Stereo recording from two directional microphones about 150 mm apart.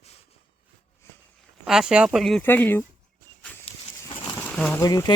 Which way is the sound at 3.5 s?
10° left (ahead or behind).